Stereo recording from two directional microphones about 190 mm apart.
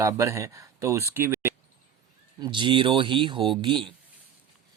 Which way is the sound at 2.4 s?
25° right (ahead or behind).